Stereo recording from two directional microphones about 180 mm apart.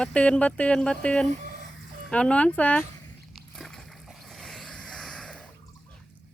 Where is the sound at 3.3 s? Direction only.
Centre (ahead or behind).